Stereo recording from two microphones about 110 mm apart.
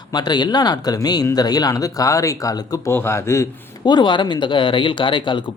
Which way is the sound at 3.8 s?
45° left (ahead or behind).